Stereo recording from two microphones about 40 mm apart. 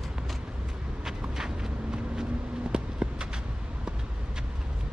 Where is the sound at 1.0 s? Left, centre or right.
Centre.